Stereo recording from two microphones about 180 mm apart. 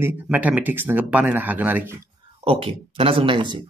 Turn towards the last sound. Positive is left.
turn(degrees=-25)  # may be behind; listen again after turning